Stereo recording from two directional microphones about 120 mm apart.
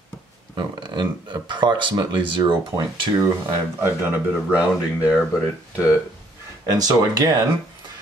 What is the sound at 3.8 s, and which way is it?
Speech, 15° right (ahead or behind).